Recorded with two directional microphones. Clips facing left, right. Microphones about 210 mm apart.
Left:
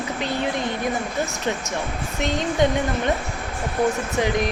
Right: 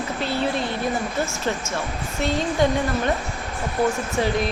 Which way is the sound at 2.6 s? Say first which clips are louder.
Left 1 dB; 20° left (ahead or behind).